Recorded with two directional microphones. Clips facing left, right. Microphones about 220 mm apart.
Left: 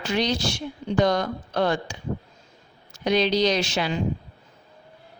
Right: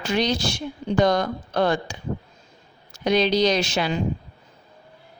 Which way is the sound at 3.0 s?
45° right (ahead or behind).